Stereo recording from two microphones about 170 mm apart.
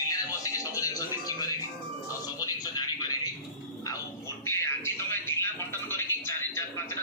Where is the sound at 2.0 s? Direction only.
20° left (ahead or behind).